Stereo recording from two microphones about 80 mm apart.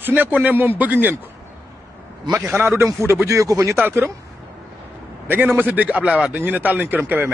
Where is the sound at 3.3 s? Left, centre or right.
Right.